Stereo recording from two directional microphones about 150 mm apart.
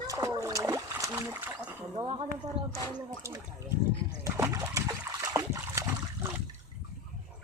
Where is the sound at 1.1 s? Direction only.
15° right (ahead or behind).